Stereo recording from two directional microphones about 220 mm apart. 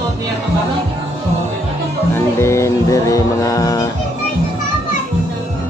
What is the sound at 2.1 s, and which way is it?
Music, 10° left (ahead or behind).